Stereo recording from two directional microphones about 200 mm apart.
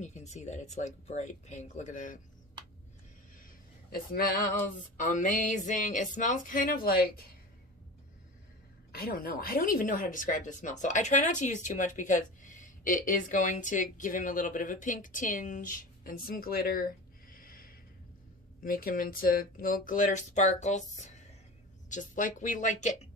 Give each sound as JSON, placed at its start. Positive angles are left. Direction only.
{"t": 0.0, "sound": "speech", "side_deg": 35}
{"t": 4.1, "sound": "speech", "side_deg": 45}
{"t": 8.9, "sound": "speech", "side_deg": 50}